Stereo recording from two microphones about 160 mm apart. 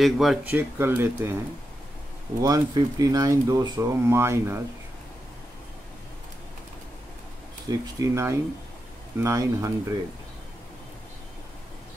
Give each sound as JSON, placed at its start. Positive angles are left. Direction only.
{"t": 0.0, "sound": "speech", "side_deg": 0}
{"t": 0.5, "sound": "speech", "side_deg": -15}
{"t": 2.4, "sound": "speech", "side_deg": -20}
{"t": 7.7, "sound": "speech", "side_deg": -20}